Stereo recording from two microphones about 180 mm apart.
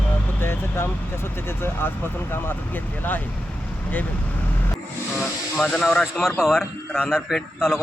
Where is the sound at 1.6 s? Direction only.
10° left (ahead or behind).